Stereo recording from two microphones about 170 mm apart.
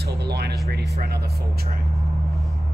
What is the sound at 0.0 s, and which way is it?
Speech, 75° right (ahead or behind).